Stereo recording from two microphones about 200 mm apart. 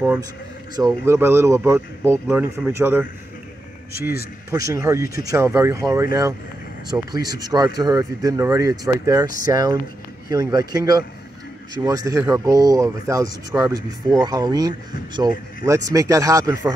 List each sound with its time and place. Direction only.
0.7 s speech: 15° right (ahead or behind)
4.5 s speech: 15° right (ahead or behind)